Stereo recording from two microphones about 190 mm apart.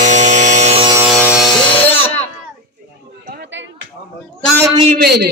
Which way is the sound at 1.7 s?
10° left (ahead or behind).